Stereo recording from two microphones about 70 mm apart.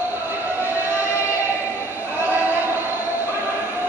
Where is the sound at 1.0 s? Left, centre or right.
Left.